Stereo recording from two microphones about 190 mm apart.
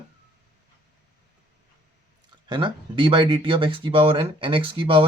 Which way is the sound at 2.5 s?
25° right (ahead or behind).